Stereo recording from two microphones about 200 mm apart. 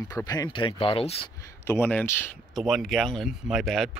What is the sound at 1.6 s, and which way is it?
Speech, 10° left (ahead or behind).